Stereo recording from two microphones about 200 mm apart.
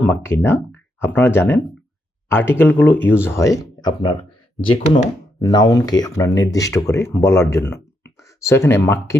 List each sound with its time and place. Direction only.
0.0 s speech: 10° left (ahead or behind)